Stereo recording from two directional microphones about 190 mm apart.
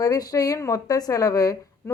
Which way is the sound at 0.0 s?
20° left (ahead or behind).